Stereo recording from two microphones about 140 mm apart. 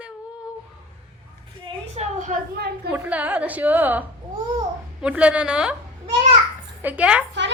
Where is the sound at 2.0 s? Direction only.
60° right (ahead or behind).